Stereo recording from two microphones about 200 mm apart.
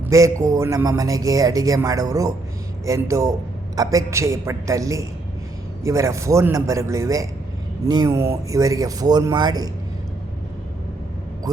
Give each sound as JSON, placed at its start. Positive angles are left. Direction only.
{"t": 0.1, "sound": "speech", "side_deg": -15}
{"t": 11.5, "sound": "speech", "side_deg": -20}